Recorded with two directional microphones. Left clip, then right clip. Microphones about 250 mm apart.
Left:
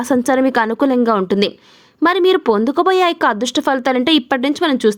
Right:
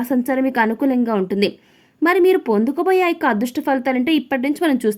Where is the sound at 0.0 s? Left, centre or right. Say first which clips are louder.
Left 5 dB; centre.